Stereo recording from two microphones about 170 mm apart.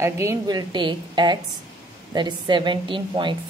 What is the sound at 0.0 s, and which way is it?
A woman's voice, 15° right (ahead or behind).